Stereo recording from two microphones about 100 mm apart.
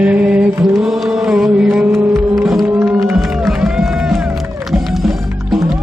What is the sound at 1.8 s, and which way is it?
Music, 25° right (ahead or behind).